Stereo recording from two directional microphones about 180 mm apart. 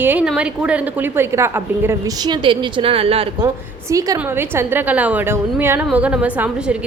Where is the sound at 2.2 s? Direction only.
25° right (ahead or behind).